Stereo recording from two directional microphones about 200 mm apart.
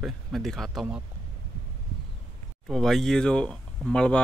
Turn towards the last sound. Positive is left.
turn(degrees=5)  # may be behind; listen again after turning